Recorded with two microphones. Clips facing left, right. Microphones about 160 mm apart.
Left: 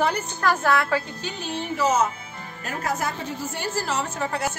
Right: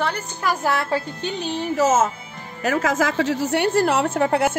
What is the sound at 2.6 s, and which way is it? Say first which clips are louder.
A woman's voice: right 8 dB; 90° right.